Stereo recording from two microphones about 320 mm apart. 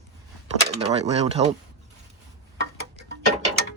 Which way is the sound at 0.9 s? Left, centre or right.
Centre.